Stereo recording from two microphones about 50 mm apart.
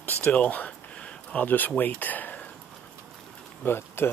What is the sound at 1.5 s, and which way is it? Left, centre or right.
Speech, left.